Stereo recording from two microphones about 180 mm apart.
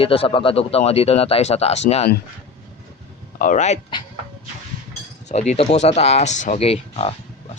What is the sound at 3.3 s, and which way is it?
Speech, 45° left (ahead or behind).